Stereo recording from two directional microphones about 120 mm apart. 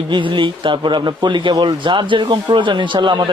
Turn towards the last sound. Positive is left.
turn(degrees=-40)  # may be behind; listen again after turning